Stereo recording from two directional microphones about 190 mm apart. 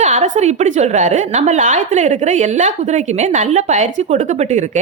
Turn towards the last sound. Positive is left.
turn(degrees=-40)  # may be behind; listen again after turning